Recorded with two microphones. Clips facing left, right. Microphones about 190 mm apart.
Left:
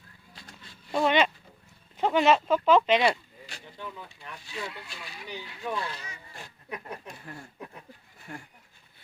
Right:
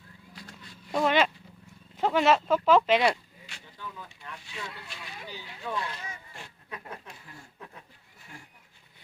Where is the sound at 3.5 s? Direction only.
35° left (ahead or behind).